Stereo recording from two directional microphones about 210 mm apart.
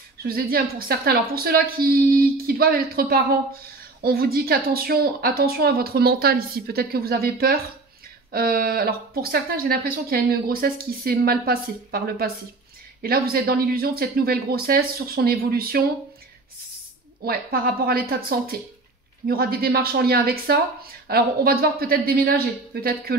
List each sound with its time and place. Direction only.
0.2 s speech: 45° right (ahead or behind)
17.2 s speech: 45° right (ahead or behind)